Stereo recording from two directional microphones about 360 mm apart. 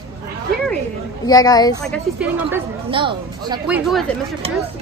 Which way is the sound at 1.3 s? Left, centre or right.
Centre.